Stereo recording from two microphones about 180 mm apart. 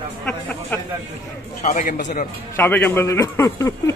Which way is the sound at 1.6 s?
45° left (ahead or behind).